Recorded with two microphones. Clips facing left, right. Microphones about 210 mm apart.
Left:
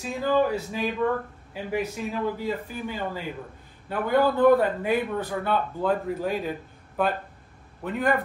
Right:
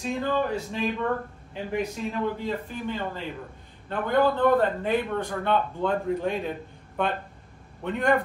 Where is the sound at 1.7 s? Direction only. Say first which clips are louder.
Even; 5° left (ahead or behind).